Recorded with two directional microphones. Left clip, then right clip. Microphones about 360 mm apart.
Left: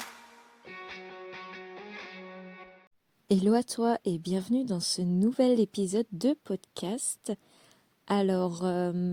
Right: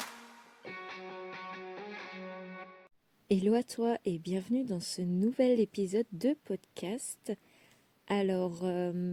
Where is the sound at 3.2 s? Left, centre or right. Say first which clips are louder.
Left 3 dB; left.